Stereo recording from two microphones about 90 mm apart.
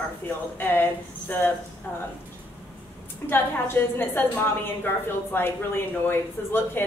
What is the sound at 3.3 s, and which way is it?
Speech, 25° left (ahead or behind).